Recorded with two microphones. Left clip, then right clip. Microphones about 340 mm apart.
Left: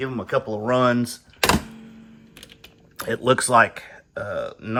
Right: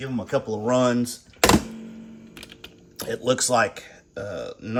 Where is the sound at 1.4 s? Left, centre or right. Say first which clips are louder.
Right 2 dB; centre.